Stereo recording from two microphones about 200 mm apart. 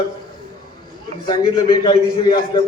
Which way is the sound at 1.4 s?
20° left (ahead or behind).